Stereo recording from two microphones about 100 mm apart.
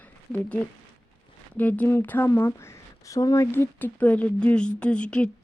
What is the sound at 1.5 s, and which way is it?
Speech, 15° left (ahead or behind).